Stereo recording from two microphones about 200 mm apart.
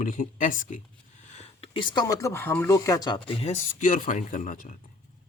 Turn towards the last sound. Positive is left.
turn(degrees=40)  # may be behind; listen again after turning